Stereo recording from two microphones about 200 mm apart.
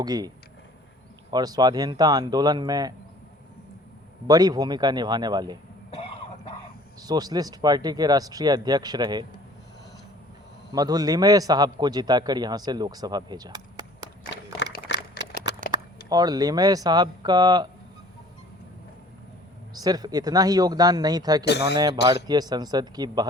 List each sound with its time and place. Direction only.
0.0 s a man's voice: 20° right (ahead or behind)
1.3 s a man's voice: 20° right (ahead or behind)
4.3 s a man's voice: 20° right (ahead or behind)
7.0 s a man's voice: 20° right (ahead or behind)
10.7 s a man's voice: 20° right (ahead or behind)
14.6 s a sound: 60° left (ahead or behind)
16.0 s a man's voice: 20° right (ahead or behind)
19.7 s a man's voice: 20° right (ahead or behind)
21.4 s speech: 55° left (ahead or behind)
22.3 s a man's voice: 20° right (ahead or behind)